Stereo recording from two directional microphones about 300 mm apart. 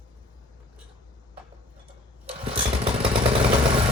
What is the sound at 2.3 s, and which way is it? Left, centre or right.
Motorcycle, centre.